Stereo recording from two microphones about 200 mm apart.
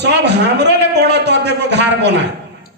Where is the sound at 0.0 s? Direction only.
60° right (ahead or behind).